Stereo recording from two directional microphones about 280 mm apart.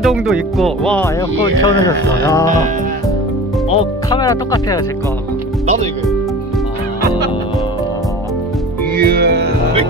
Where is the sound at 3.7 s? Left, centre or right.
Centre.